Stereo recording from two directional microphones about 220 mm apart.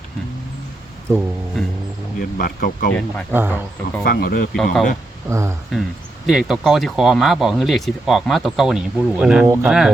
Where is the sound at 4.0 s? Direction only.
45° left (ahead or behind).